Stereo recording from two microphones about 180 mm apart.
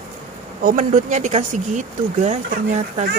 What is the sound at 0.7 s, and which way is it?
Speech, 45° right (ahead or behind).